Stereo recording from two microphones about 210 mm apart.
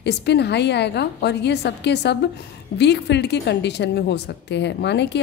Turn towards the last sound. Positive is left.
turn(degrees=55)  # may be behind; listen again after turning